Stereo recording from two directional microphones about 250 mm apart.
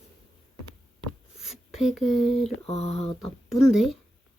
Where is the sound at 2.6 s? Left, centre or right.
Left.